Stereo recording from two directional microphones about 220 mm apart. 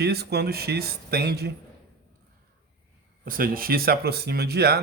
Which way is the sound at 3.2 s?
40° right (ahead or behind).